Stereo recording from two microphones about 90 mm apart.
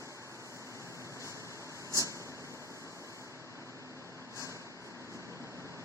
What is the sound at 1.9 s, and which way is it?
Vehicle, 35° right (ahead or behind).